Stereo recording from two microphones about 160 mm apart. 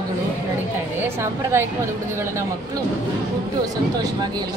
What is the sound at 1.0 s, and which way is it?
Speech, 15° right (ahead or behind).